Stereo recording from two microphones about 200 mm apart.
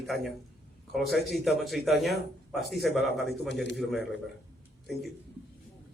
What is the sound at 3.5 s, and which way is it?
Speech, 60° left (ahead or behind).